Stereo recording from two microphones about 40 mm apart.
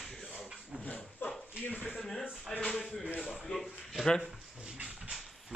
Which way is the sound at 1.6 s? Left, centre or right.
Left.